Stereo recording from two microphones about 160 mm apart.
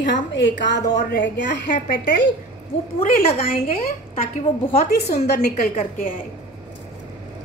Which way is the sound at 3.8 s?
55° left (ahead or behind).